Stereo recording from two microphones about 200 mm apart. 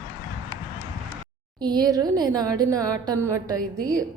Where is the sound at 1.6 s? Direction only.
20° right (ahead or behind).